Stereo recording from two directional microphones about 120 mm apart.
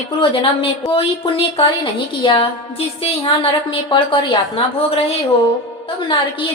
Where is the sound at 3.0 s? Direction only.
55° left (ahead or behind).